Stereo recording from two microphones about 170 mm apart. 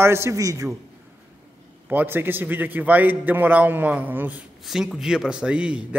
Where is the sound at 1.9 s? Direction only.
10° right (ahead or behind).